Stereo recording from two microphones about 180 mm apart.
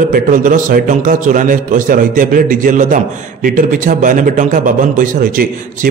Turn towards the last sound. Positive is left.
turn(degrees=-50)  # may be behind; listen again after turning